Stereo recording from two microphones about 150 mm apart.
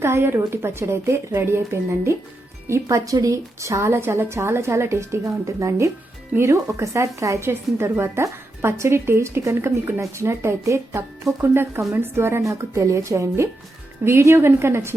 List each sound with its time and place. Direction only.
0.0 s a woman's voice: 15° right (ahead or behind)